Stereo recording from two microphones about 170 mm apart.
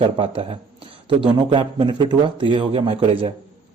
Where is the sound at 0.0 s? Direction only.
35° right (ahead or behind).